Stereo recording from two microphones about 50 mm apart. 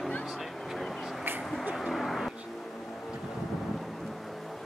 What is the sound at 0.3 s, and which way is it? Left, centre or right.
Vehicle, centre.